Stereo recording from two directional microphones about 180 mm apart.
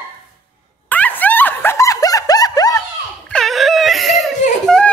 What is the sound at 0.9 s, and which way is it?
Snicker, 10° left (ahead or behind).